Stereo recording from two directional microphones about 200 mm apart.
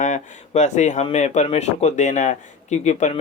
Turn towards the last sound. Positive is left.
turn(degrees=35)  # may be behind; listen again after turning